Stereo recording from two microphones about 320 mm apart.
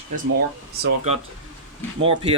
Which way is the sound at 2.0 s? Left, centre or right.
Centre.